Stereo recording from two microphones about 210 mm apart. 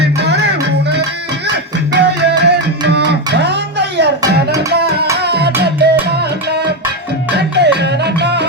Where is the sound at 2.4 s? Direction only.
55° right (ahead or behind).